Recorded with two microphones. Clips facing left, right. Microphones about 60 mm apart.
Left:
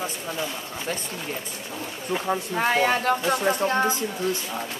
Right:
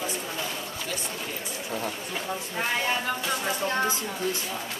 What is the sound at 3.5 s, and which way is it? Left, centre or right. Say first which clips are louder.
Speech: left 4 dB; left.